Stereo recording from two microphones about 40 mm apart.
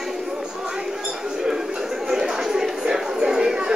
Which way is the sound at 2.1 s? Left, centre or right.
Centre.